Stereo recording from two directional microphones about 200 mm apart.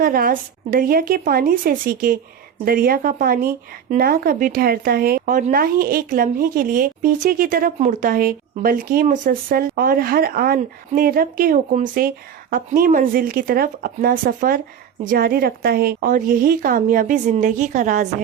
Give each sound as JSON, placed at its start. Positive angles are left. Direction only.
{"t": 0.0, "sound": "speech", "side_deg": -45}